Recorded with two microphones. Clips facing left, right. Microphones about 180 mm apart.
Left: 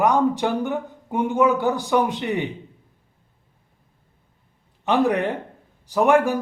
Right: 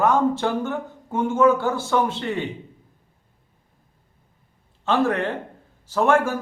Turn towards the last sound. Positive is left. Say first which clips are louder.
# left 2 dB
turn(degrees=15)  # may be behind; listen again after turning